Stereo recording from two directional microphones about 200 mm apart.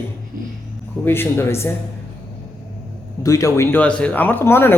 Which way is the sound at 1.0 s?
10° left (ahead or behind).